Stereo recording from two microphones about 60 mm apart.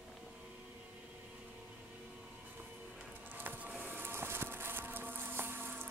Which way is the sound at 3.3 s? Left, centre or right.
Right.